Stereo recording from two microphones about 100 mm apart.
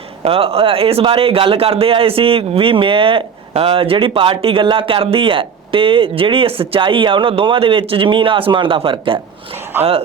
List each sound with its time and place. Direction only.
0.3 s a man's voice: 75° right (ahead or behind)